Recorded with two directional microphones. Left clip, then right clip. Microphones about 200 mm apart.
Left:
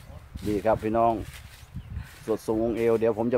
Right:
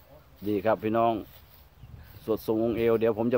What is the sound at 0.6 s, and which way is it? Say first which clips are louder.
Speech: left 2 dB; centre (ahead or behind).